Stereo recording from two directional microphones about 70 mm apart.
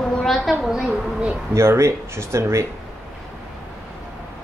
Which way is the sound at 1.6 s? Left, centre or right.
Right.